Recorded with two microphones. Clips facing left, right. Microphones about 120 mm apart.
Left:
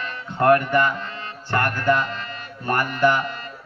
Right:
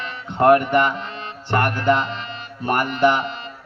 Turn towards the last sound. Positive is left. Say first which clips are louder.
# right 2 dB
turn(degrees=-25)  # may be behind; listen again after turning